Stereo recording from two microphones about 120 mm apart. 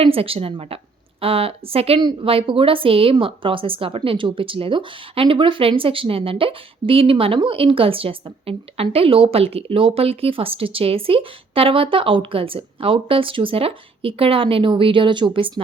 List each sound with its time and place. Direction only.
0.0 s speech: 55° right (ahead or behind)
2.0 s speech: 45° right (ahead or behind)